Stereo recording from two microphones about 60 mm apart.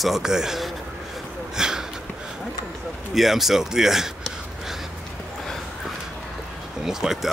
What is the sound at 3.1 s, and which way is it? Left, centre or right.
Speech, centre.